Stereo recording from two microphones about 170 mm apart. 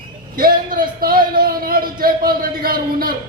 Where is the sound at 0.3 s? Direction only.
60° right (ahead or behind).